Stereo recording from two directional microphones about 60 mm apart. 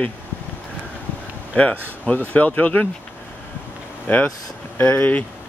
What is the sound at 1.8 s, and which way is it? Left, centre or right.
Speech, left.